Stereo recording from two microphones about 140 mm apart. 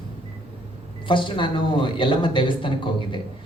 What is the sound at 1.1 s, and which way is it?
Speech, 35° left (ahead or behind).